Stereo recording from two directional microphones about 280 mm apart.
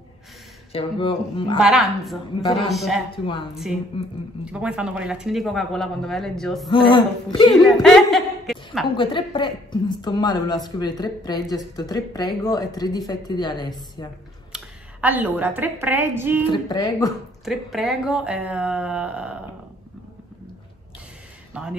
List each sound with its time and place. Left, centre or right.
0.7 s speech: centre
1.6 s speech: centre
3.1 s a woman's voice: centre
4.5 s speech: centre
6.7 s speech: centre
7.7 s a sound: centre
8.9 s speech: centre
14.5 s a woman's voice: centre
16.4 s speech: centre
17.5 s speech: centre
21.5 s speech: centre